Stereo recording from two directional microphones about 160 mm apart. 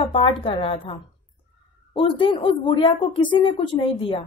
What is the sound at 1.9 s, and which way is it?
Speech, 30° left (ahead or behind).